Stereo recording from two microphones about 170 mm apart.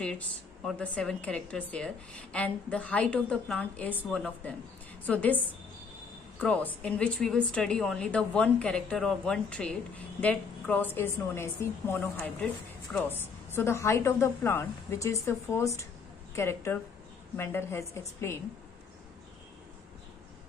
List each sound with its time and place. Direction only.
0.7 s a woman's voice: 5° left (ahead or behind)